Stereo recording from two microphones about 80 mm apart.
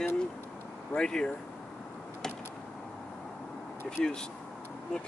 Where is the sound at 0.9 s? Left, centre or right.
Centre.